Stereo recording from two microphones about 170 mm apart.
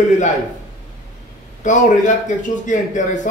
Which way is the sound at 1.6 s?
45° left (ahead or behind).